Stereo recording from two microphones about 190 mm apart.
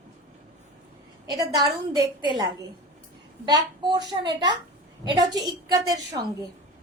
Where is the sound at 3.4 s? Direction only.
20° right (ahead or behind).